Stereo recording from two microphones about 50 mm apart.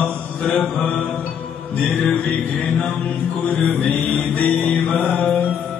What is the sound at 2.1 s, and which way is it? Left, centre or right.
Mantra, left.